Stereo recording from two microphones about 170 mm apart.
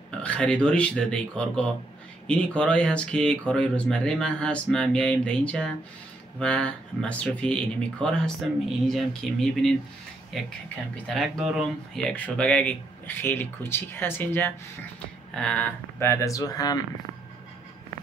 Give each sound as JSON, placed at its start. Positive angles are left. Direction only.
{"t": 0.2, "sound": "speech", "side_deg": 5}